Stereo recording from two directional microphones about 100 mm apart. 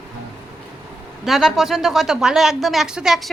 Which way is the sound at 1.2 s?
Centre (ahead or behind).